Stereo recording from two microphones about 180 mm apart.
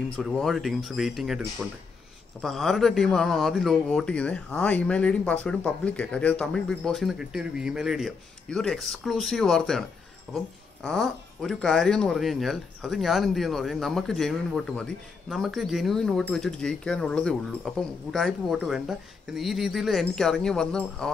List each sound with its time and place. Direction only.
0.1 s speech: centre (ahead or behind)